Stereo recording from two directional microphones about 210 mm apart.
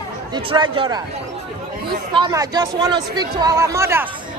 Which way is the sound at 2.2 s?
15° right (ahead or behind).